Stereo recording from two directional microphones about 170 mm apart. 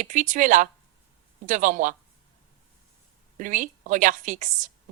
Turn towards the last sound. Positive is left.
turn(degrees=-50)  # may be behind; listen again after turning